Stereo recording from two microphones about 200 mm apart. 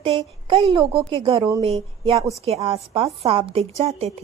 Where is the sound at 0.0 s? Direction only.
30° right (ahead or behind).